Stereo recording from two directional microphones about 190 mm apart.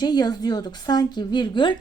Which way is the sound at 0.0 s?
20° left (ahead or behind).